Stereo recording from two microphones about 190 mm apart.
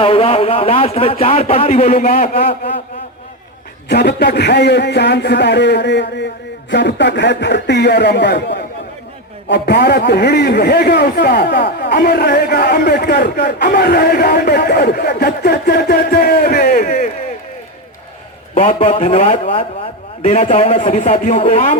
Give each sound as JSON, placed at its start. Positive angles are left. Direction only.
{"t": 0.0, "sound": "speech", "side_deg": 30}
{"t": 2.5, "sound": "speech", "side_deg": 30}
{"t": 3.8, "sound": "a man's voice", "side_deg": 60}
{"t": 18.5, "sound": "speech", "side_deg": 35}